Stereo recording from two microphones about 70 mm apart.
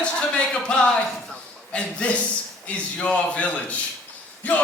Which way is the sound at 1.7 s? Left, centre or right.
Centre.